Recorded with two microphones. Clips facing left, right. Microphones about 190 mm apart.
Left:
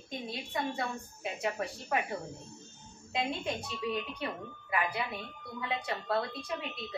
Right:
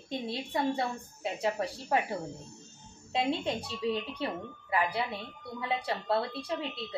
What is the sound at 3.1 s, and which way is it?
Speech, 30° right (ahead or behind).